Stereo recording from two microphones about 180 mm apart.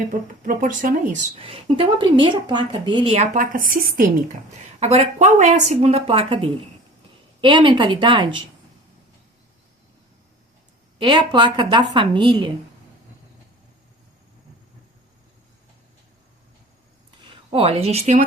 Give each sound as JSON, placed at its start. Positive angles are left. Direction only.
{"t": 0.1, "sound": "speech", "side_deg": -45}
{"t": 1.4, "sound": "a woman's voice", "side_deg": -30}
{"t": 3.3, "sound": "speech", "side_deg": -50}
{"t": 4.8, "sound": "a woman's voice", "side_deg": -35}
{"t": 10.9, "sound": "a woman's voice", "side_deg": -25}
{"t": 17.2, "sound": "speech", "side_deg": -30}